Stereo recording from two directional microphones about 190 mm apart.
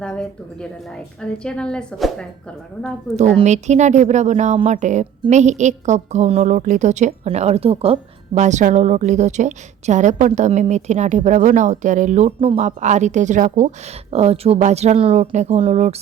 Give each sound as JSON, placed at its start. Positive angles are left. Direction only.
{"t": 0.0, "sound": "a woman's voice", "side_deg": 5}
{"t": 3.2, "sound": "a woman's voice", "side_deg": -35}